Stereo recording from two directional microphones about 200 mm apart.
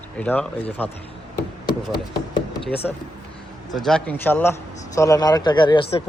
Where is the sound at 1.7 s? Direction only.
55° left (ahead or behind).